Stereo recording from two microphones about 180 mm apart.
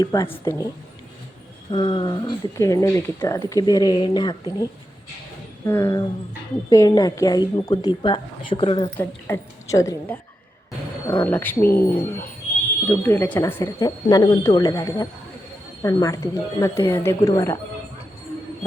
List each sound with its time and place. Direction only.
0.0 s speech: 20° left (ahead or behind)
1.7 s speech: 30° left (ahead or behind)
5.6 s a woman's voice: 15° left (ahead or behind)
9.0 s a woman's voice: 15° left (ahead or behind)